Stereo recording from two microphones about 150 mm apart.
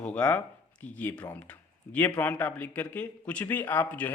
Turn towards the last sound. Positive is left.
turn(degrees=10)  # may be behind; listen again after turning